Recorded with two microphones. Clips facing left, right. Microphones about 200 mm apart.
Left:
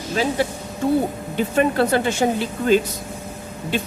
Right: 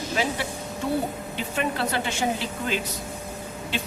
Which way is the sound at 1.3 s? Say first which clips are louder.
Left 11 dB; 45° left (ahead or behind).